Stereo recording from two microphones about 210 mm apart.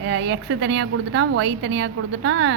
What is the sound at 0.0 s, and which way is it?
A woman's voice, 60° right (ahead or behind).